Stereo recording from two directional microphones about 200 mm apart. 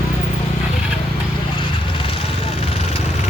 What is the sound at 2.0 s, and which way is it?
Vehicle, 25° left (ahead or behind).